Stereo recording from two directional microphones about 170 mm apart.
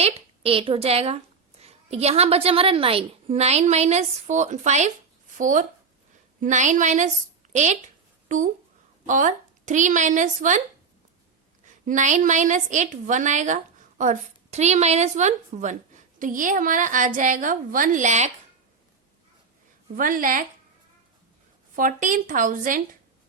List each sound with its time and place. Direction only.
0.0 s a woman's voice: 35° right (ahead or behind)
11.6 s a woman's voice: 45° right (ahead or behind)
20.0 s a woman's voice: 55° right (ahead or behind)
21.8 s a woman's voice: 50° right (ahead or behind)